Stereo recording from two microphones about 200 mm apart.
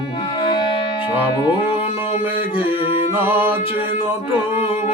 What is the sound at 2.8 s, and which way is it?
Music, 30° left (ahead or behind).